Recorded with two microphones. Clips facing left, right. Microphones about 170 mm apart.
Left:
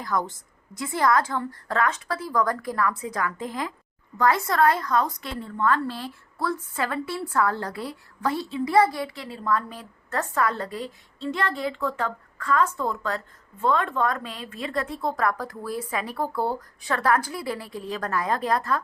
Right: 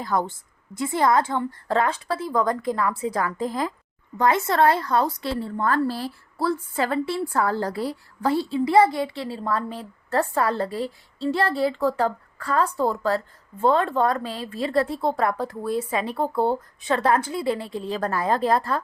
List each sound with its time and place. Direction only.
0.0 s a woman's voice: 30° right (ahead or behind)
4.2 s a woman's voice: 25° right (ahead or behind)